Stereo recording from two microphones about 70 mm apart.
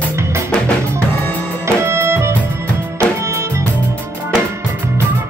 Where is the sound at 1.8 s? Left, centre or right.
Right.